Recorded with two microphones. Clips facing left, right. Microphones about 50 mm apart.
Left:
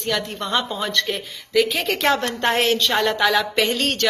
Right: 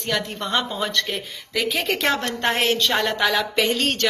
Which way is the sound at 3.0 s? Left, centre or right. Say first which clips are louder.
Left 2 dB; centre.